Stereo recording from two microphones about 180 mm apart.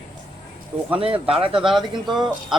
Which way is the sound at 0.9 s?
30° right (ahead or behind).